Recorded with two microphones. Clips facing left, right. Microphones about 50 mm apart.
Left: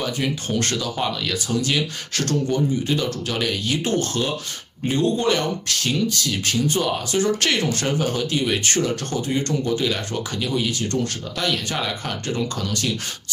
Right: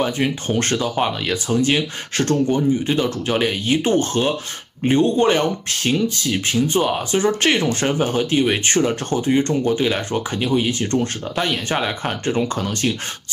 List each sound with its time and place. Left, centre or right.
0.0 s speech: right